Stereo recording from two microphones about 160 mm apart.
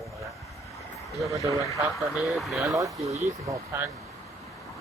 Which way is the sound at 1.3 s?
20° right (ahead or behind).